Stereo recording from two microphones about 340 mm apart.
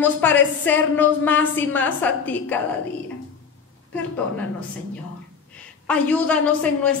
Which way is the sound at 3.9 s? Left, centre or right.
Centre.